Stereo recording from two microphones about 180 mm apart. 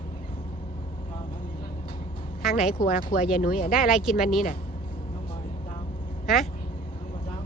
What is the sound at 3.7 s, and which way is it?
Speech, 5° right (ahead or behind).